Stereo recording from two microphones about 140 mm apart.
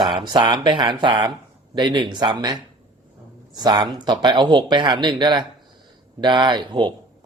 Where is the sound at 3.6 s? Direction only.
30° right (ahead or behind).